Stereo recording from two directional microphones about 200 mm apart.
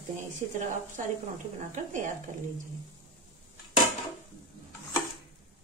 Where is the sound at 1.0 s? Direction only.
40° right (ahead or behind).